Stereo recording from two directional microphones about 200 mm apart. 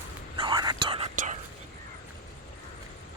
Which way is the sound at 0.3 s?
20° right (ahead or behind).